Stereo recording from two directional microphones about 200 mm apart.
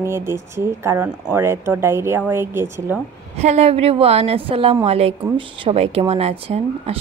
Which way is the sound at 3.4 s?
35° right (ahead or behind).